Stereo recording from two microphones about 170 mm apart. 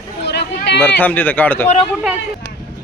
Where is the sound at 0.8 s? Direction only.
10° left (ahead or behind).